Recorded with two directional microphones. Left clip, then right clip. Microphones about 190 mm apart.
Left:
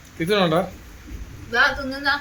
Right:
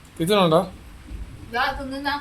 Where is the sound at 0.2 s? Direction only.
35° right (ahead or behind).